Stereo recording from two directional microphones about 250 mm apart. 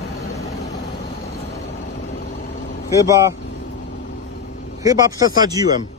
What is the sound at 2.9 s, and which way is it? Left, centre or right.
Speech, centre.